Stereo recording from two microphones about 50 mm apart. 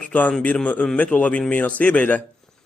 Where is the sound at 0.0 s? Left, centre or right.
Left.